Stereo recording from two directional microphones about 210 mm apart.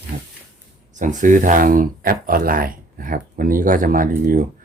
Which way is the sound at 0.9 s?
35° right (ahead or behind).